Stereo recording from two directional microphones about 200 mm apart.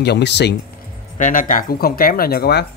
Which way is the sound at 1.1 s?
40° left (ahead or behind).